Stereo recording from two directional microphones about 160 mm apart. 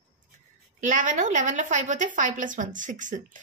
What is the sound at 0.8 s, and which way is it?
A woman's voice, 50° right (ahead or behind).